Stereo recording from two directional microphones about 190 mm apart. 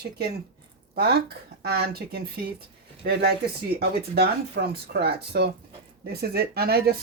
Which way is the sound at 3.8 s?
55° right (ahead or behind).